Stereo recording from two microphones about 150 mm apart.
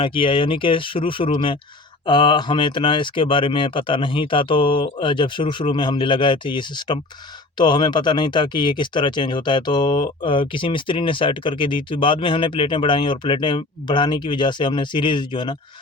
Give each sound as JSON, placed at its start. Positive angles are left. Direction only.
{"t": 0.0, "sound": "speech", "side_deg": 35}